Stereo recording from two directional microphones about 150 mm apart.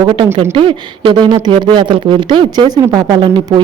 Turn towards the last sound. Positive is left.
turn(degrees=-30)  # may be behind; listen again after turning